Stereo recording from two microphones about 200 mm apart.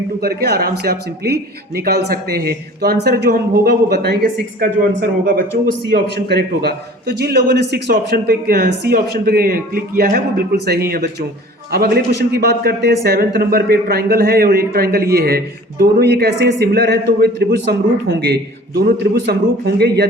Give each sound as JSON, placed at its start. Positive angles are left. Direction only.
{"t": 0.2, "sound": "a man's voice", "side_deg": -50}